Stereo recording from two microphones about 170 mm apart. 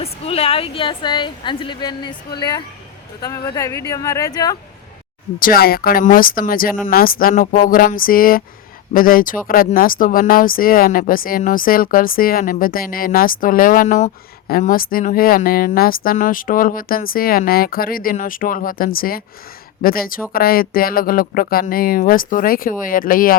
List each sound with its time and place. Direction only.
0.0 s speech: 35° left (ahead or behind)
5.4 s speech: 60° left (ahead or behind)